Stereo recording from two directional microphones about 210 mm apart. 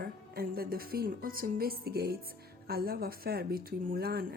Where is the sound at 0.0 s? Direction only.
45° right (ahead or behind).